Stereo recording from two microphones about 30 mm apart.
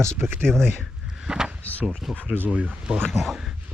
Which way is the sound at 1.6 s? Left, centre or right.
Left.